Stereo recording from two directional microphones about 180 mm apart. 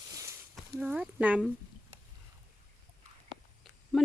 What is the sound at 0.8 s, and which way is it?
Speech, 5° right (ahead or behind).